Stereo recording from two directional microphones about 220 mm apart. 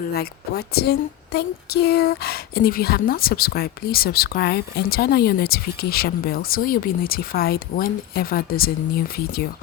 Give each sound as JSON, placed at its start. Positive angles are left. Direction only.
{"t": 0.0, "sound": "a woman's voice", "side_deg": 45}